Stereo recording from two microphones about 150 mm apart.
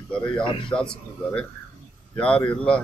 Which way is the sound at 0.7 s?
5° left (ahead or behind).